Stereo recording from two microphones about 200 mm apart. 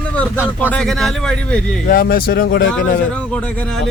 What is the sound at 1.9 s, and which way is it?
Speech, 45° left (ahead or behind).